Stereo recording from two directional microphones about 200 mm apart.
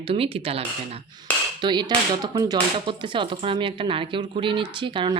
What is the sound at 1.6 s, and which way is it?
Speech, 20° right (ahead or behind).